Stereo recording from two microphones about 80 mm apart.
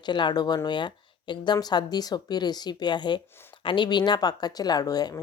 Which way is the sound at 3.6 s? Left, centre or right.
Left.